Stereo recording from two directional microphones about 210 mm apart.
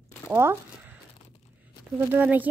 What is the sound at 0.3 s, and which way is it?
Speech, 10° right (ahead or behind).